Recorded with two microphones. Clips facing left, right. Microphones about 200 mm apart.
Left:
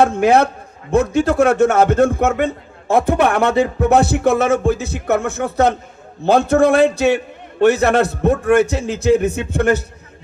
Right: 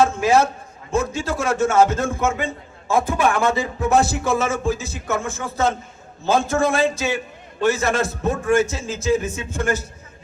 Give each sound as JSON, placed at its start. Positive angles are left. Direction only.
{"t": 0.0, "sound": "a man's voice", "side_deg": 60}